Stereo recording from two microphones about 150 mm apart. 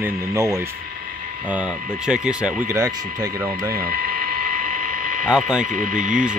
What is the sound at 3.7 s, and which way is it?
Speech, 75° right (ahead or behind).